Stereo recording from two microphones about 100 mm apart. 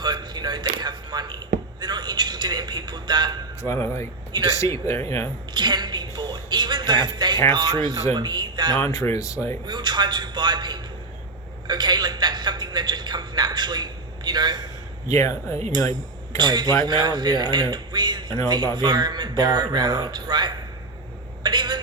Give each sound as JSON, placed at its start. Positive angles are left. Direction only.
{"t": 0.0, "sound": "a sound", "side_deg": -45}
{"t": 3.6, "sound": "speech", "side_deg": 25}
{"t": 4.3, "sound": "speech", "side_deg": -50}
{"t": 4.5, "sound": "speech", "side_deg": 30}
{"t": 5.5, "sound": "music", "side_deg": -45}
{"t": 7.5, "sound": "speech", "side_deg": -45}
{"t": 8.9, "sound": "speech", "side_deg": 30}
{"t": 9.6, "sound": "a man's voice", "side_deg": -45}
{"t": 15.1, "sound": "speech", "side_deg": 30}
{"t": 16.4, "sound": "speech", "side_deg": -45}
{"t": 21.4, "sound": "a sound", "side_deg": -45}